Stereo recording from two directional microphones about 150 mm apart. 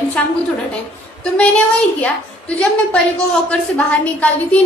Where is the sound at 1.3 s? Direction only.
10° left (ahead or behind).